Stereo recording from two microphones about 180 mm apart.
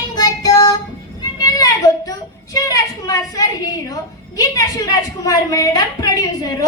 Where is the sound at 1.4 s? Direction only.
20° left (ahead or behind).